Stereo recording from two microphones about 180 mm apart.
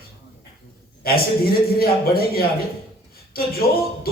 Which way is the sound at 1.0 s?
55° left (ahead or behind).